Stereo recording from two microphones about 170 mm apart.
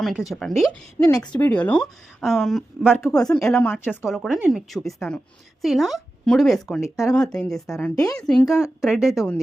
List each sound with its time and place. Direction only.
0.0 s a woman's voice: centre (ahead or behind)
7.9 s a woman's voice: 20° left (ahead or behind)
8.3 s a woman's voice: centre (ahead or behind)